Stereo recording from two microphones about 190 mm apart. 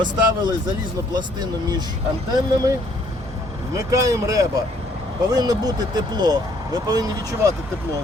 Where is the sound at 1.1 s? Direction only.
20° right (ahead or behind).